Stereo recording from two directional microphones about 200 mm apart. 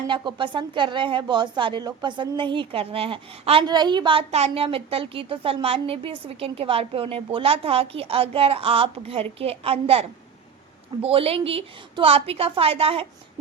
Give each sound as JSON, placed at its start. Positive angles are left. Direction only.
{"t": 0.1, "sound": "a woman's voice", "side_deg": -25}